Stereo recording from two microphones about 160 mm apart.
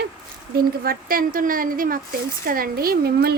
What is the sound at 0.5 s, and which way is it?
A woman's voice, 70° right (ahead or behind).